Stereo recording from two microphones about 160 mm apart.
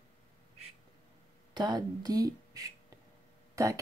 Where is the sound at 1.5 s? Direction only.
25° right (ahead or behind).